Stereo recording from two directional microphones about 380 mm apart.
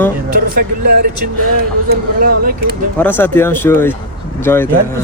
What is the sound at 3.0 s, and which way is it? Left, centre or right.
Speech, centre.